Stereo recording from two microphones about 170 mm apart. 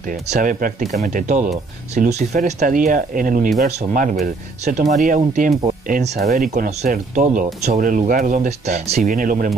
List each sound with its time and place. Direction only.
0.1 s speech: 50° right (ahead or behind)